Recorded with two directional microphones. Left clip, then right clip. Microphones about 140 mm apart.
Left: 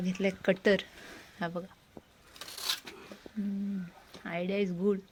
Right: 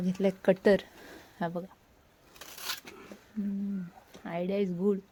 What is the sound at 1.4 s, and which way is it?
Speech, 20° right (ahead or behind).